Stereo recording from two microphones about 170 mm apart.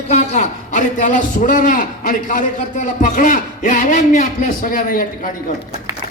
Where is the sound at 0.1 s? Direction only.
40° left (ahead or behind).